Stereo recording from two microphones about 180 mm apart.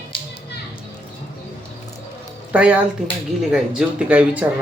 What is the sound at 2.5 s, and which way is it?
Speech, 5° right (ahead or behind).